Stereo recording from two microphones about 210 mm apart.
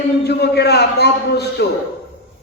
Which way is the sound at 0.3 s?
50° left (ahead or behind).